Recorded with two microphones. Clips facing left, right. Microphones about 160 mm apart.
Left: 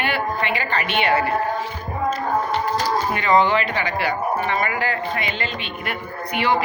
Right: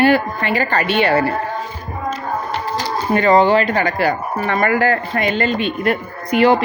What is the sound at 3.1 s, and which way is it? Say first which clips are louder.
Speech: right 7 dB; 40° right (ahead or behind).